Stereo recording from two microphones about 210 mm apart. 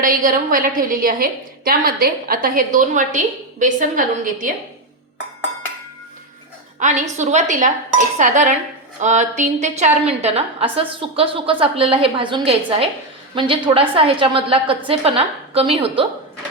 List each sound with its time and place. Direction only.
0.0 s a woman's voice: 40° right (ahead or behind)
6.7 s a woman's voice: 35° right (ahead or behind)